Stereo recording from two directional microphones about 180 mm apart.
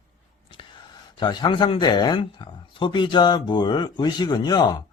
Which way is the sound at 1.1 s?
25° left (ahead or behind).